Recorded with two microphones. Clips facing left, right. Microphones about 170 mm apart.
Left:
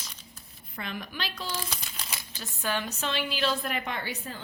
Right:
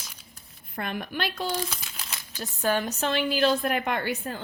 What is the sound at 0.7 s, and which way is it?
Speech, 55° right (ahead or behind).